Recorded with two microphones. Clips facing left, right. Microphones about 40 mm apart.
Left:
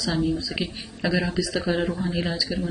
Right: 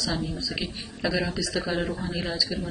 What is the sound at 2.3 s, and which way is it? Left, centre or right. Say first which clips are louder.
Speech: left 1 dB; centre.